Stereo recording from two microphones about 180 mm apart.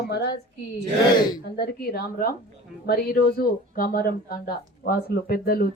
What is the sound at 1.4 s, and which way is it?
A woman's voice, 60° left (ahead or behind).